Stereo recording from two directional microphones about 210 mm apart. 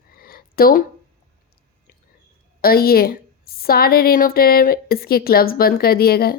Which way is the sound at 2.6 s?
45° left (ahead or behind).